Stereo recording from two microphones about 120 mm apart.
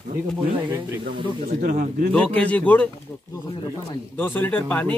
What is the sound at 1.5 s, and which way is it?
Speech, 90° right.